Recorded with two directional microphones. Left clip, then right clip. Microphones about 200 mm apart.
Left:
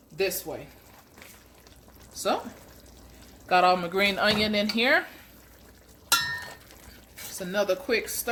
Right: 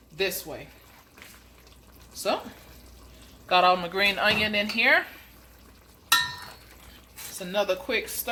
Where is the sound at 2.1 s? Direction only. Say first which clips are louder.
Even; 20° left (ahead or behind).